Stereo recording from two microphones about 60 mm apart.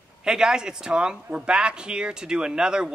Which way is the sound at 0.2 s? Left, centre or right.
Centre.